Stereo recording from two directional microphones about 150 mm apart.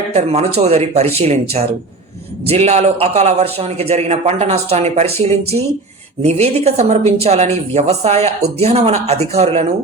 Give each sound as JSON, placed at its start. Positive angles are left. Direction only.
{"t": 0.1, "sound": "a woman's voice", "side_deg": -45}